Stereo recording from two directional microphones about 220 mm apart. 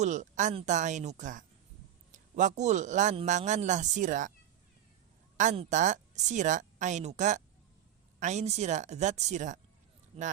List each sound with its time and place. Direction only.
0.0 s speech: 35° right (ahead or behind)
5.4 s speech: 35° right (ahead or behind)